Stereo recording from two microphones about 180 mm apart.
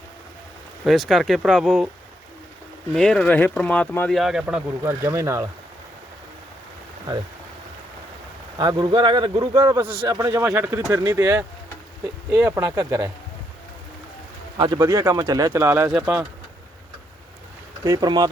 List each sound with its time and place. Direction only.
0.9 s speech: centre (ahead or behind)
2.9 s speech: 5° left (ahead or behind)
4.8 s speech: 15° right (ahead or behind)
8.5 s speech: 25° right (ahead or behind)
14.6 s speech: 20° right (ahead or behind)
17.8 s speech: 20° right (ahead or behind)